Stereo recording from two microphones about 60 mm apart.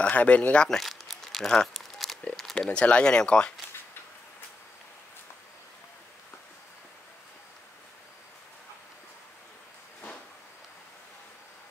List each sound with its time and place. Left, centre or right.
0.1 s speech: left
0.7 s crumpling: centre
2.3 s a sound: centre
2.7 s speech: centre